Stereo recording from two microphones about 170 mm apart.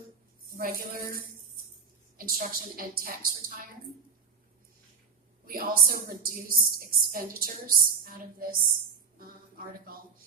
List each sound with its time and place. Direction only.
0.4 s a woman's voice: 60° right (ahead or behind)
5.5 s a woman's voice: 60° right (ahead or behind)